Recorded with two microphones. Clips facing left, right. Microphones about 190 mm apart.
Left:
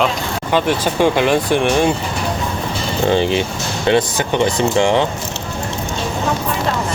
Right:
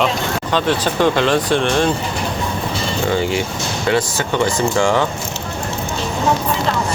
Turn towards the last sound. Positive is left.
turn(degrees=20)  # may be behind; listen again after turning